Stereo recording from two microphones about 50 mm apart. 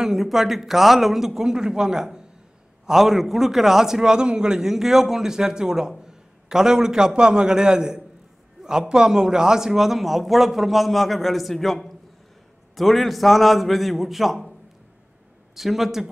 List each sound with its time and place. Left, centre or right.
0.0 s a man's voice: centre
15.5 s a man's voice: centre